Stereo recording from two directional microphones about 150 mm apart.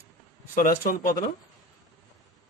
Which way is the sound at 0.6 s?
65° left (ahead or behind).